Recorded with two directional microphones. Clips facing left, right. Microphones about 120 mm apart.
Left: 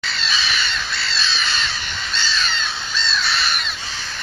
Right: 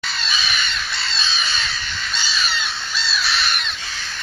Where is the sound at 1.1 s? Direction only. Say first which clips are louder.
Left 2 dB; 15° right (ahead or behind).